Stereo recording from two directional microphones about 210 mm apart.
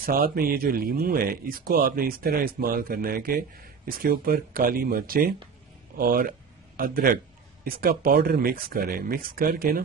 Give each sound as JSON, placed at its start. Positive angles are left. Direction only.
{"t": 0.0, "sound": "speech", "side_deg": -45}